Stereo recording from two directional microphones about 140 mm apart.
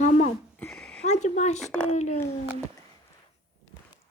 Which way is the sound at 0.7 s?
5° left (ahead or behind).